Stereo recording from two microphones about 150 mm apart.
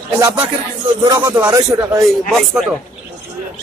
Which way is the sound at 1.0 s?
20° right (ahead or behind).